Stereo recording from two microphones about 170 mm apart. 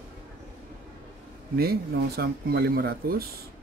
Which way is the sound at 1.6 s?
65° right (ahead or behind).